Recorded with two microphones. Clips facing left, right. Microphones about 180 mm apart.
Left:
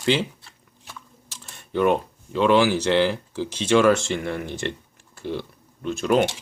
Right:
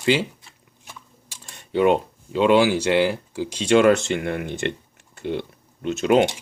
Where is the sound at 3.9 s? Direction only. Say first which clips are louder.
Right 2 dB; 60° right (ahead or behind).